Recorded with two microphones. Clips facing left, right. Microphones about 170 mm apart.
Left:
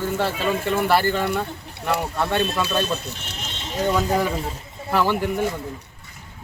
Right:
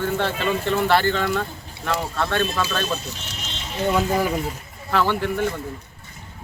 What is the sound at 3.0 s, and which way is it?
Speech, 55° left (ahead or behind).